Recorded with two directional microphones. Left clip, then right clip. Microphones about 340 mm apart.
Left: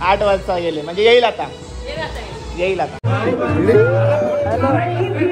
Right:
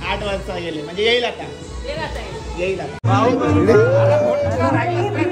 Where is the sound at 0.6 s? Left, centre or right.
Centre.